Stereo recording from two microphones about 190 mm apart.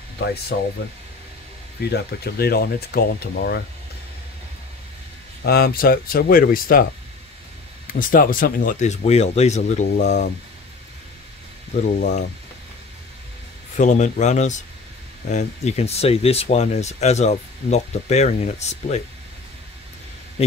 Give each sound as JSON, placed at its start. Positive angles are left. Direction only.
{"t": 0.2, "sound": "speech", "side_deg": 60}
{"t": 1.9, "sound": "speech", "side_deg": 55}
{"t": 5.4, "sound": "speech", "side_deg": 55}
{"t": 11.7, "sound": "speech", "side_deg": 40}
{"t": 13.7, "sound": "speech", "side_deg": 40}
{"t": 20.4, "sound": "speech", "side_deg": 30}